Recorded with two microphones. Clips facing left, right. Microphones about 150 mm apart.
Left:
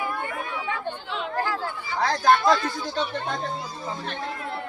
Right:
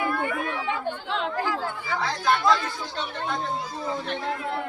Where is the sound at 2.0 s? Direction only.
45° left (ahead or behind).